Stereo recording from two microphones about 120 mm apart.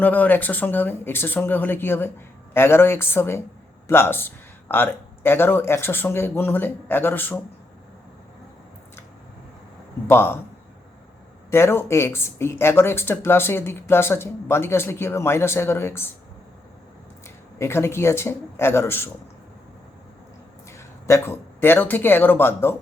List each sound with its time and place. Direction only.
0.0 s speech: 15° left (ahead or behind)
10.1 s speech: 20° left (ahead or behind)
11.5 s speech: 20° left (ahead or behind)
17.2 s speech: 20° left (ahead or behind)
20.7 s speech: 25° left (ahead or behind)